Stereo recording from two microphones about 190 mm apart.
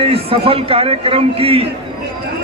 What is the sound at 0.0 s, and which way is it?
A man's voice, 30° right (ahead or behind).